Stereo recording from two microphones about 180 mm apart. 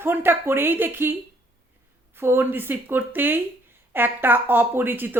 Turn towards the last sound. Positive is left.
turn(degrees=-10)  # may be behind; listen again after turning